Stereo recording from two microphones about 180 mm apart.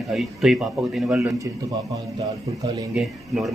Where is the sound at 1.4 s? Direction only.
20° right (ahead or behind).